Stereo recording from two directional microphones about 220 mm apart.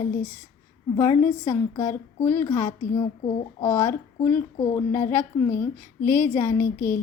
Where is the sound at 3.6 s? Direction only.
10° left (ahead or behind).